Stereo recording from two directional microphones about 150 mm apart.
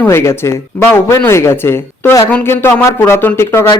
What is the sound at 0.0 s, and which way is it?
A man's voice, 15° left (ahead or behind).